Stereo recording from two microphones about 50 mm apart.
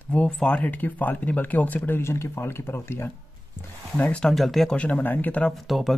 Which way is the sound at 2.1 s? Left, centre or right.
Left.